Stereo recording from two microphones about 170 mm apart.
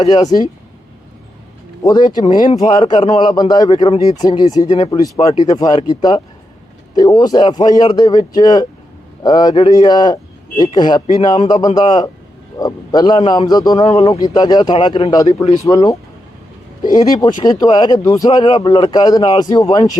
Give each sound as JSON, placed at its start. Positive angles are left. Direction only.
{"t": 0.0, "sound": "a man's voice", "side_deg": 25}
{"t": 1.8, "sound": "a man's voice", "side_deg": 25}
{"t": 17.2, "sound": "a man's voice", "side_deg": 25}